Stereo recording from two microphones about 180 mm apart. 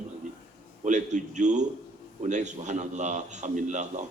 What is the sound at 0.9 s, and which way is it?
A man's voice, 45° right (ahead or behind).